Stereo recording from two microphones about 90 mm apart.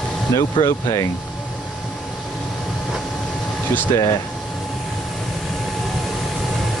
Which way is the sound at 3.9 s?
35° left (ahead or behind).